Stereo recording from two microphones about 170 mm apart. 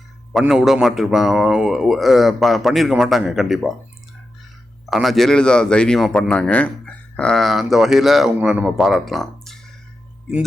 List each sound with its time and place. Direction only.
0.3 s speech: centre (ahead or behind)
4.9 s speech: centre (ahead or behind)